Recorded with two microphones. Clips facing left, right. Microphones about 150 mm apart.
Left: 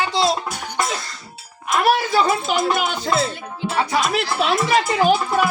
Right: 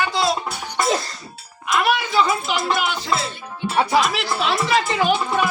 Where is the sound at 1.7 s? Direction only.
40° left (ahead or behind).